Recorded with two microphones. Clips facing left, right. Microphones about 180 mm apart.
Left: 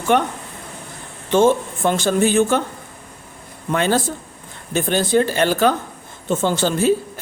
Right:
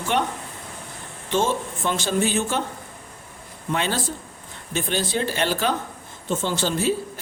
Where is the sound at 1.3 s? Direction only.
55° left (ahead or behind).